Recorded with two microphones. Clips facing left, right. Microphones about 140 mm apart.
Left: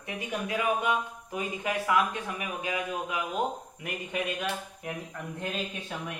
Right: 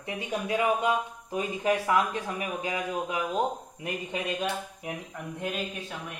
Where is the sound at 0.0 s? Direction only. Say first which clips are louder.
Right 2 dB; 25° right (ahead or behind).